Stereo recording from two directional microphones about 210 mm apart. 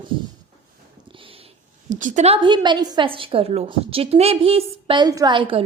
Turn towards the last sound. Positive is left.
turn(degrees=-25)  # may be behind; listen again after turning